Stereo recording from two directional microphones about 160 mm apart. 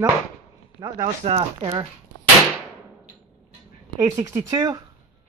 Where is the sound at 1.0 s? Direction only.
40° right (ahead or behind).